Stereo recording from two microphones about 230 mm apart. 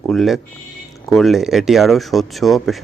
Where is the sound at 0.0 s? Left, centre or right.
Centre.